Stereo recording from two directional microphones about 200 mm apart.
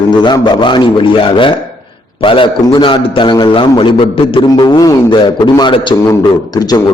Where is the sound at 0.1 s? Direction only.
20° left (ahead or behind).